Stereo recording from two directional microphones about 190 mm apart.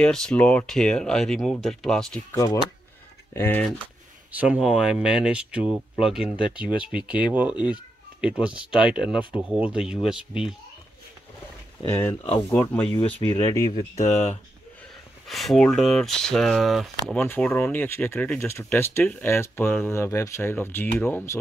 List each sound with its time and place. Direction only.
0.0 s speech: 5° left (ahead or behind)
2.3 s speech: 15° left (ahead or behind)
4.3 s speech: 5° right (ahead or behind)
11.9 s speech: 15° left (ahead or behind)
13.3 s speech: 20° left (ahead or behind)
15.2 s speech: centre (ahead or behind)